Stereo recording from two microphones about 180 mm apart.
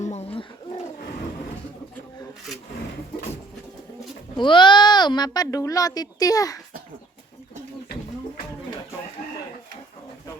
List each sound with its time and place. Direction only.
0.0 s bird: 35° left (ahead or behind)
4.4 s speech: 25° left (ahead or behind)